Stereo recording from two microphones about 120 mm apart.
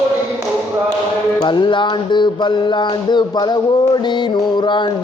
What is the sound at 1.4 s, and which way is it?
A man's voice, 40° left (ahead or behind).